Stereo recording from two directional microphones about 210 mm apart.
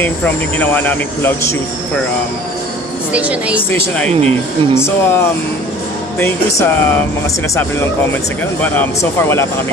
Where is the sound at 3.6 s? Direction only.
10° left (ahead or behind).